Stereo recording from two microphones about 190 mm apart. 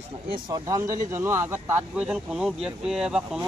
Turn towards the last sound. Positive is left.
turn(degrees=-5)  # may be behind; listen again after turning